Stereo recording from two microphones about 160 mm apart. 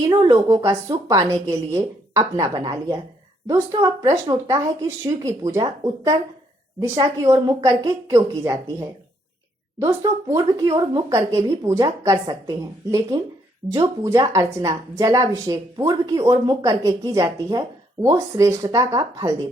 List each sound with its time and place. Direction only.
0.1 s a woman's voice: 25° right (ahead or behind)